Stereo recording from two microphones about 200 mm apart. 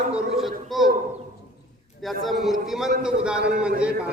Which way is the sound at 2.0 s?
Centre (ahead or behind).